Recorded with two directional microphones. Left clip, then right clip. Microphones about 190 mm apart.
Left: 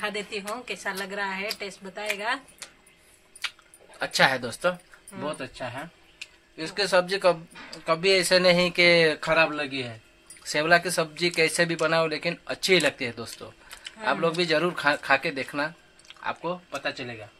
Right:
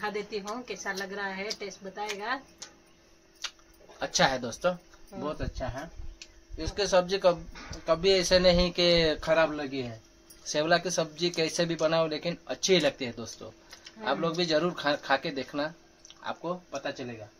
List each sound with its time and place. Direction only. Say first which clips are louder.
0.0 s speech: left 3 dB; 5° left (ahead or behind)
4.0 s speech: left 4 dB; 20° left (ahead or behind)